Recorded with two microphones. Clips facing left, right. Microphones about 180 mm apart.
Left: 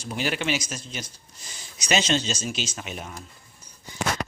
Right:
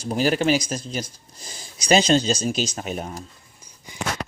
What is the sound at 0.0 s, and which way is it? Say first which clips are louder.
Speech: right 7 dB; 40° right (ahead or behind).